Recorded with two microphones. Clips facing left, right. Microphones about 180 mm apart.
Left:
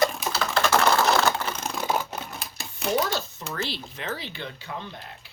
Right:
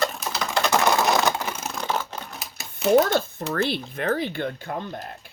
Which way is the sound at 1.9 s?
10° left (ahead or behind).